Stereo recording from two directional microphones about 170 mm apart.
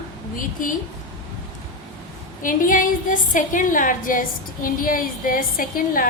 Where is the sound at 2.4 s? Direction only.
50° left (ahead or behind).